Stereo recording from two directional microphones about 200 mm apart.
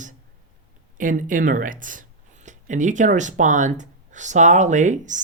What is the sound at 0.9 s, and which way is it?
Speech, 40° right (ahead or behind).